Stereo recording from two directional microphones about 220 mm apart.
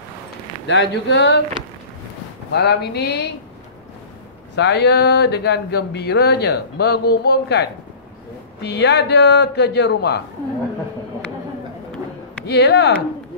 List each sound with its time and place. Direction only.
0.7 s speech: 55° left (ahead or behind)
2.5 s speech: 50° left (ahead or behind)
4.6 s speech: 50° left (ahead or behind)
8.6 s speech: 50° left (ahead or behind)
12.4 s speech: 50° left (ahead or behind)